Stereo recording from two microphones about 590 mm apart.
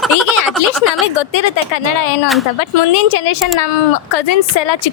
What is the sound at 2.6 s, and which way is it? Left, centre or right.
Speech, left.